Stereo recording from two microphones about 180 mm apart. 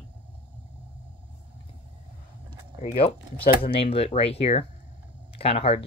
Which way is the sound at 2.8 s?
35° left (ahead or behind).